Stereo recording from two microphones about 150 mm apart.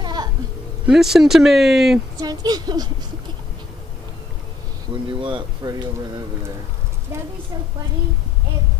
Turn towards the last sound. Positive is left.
turn(degrees=-15)  # may be behind; listen again after turning